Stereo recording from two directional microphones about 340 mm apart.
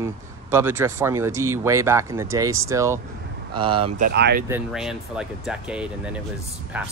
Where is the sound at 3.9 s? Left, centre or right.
Right.